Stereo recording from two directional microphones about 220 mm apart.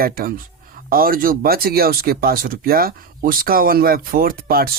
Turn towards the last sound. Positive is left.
turn(degrees=-45)  # may be behind; listen again after turning